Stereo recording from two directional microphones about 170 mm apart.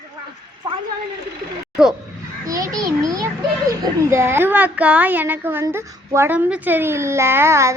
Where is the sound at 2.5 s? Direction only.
20° right (ahead or behind).